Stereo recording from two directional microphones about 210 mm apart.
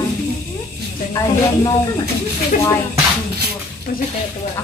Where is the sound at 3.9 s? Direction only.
45° left (ahead or behind).